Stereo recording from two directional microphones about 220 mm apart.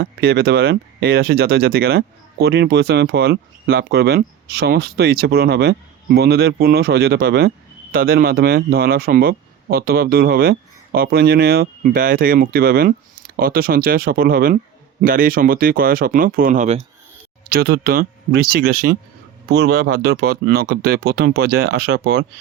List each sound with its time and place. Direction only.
0.0 s speech: 45° right (ahead or behind)
17.5 s speech: 45° right (ahead or behind)